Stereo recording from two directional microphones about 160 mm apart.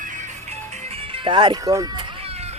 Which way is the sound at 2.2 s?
40° right (ahead or behind).